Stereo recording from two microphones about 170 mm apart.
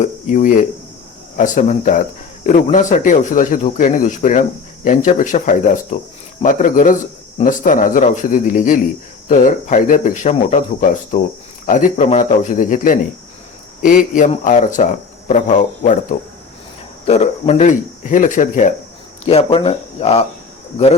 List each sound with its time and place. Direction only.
0.0 s speech: 45° left (ahead or behind)
19.2 s speech: 35° left (ahead or behind)